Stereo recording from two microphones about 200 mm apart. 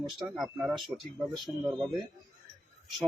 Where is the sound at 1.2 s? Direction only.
Centre (ahead or behind).